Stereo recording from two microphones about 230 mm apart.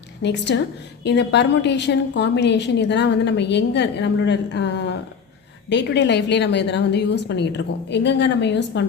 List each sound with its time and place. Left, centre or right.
0.2 s a woman's voice: left